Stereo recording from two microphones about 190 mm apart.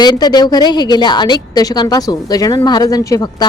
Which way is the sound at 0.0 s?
20° left (ahead or behind).